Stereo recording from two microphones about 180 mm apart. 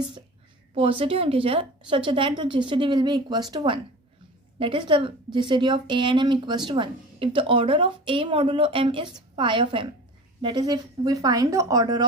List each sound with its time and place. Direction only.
0.7 s speech: 30° right (ahead or behind)